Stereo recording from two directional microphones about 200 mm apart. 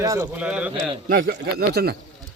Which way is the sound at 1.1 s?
50° right (ahead or behind).